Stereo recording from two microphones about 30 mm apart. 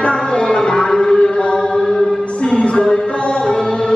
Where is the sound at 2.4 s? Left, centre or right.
Left.